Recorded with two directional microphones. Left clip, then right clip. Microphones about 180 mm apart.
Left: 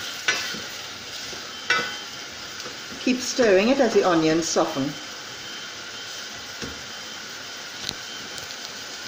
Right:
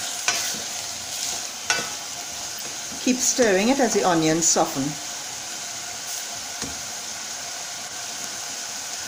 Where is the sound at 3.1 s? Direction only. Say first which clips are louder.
Even; 45° right (ahead or behind).